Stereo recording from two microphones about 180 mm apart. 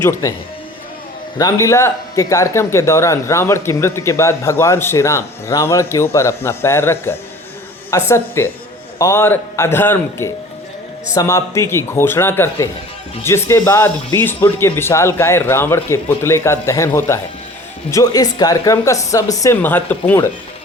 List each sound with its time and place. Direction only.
0.0 s speech: 15° left (ahead or behind)
1.4 s speech: 20° left (ahead or behind)